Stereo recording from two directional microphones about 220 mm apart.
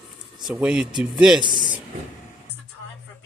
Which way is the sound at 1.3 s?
20° right (ahead or behind).